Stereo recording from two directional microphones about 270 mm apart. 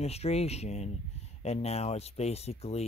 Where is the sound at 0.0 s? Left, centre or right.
Left.